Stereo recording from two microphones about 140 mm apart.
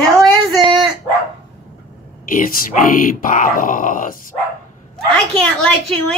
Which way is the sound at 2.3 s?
85° left.